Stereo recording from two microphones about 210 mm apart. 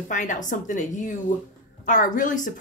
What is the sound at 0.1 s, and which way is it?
Speech, 35° left (ahead or behind).